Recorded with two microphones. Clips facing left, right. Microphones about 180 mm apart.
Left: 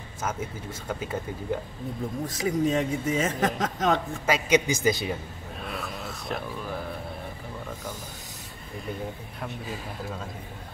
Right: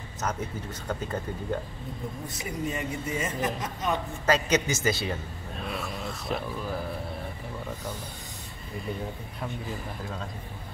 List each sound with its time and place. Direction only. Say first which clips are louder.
0.2 s speech: even; 10° left (ahead or behind)
2.2 s a man's voice: left 9 dB; 90° left
4.3 s speech: left 1 dB; 10° left (ahead or behind)
5.6 s a sound: right 1 dB; centre (ahead or behind)